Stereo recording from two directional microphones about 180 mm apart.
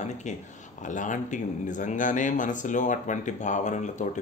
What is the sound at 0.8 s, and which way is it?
Speech, 45° left (ahead or behind).